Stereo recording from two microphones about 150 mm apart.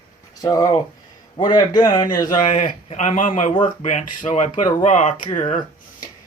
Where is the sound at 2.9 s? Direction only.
55° left (ahead or behind).